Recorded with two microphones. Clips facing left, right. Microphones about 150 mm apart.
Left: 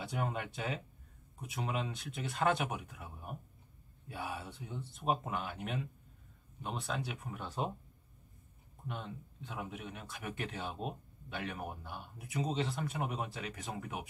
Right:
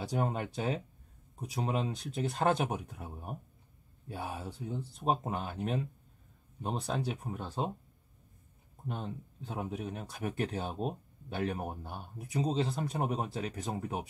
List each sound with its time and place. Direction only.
0.0 s speech: 35° right (ahead or behind)
8.8 s speech: 35° right (ahead or behind)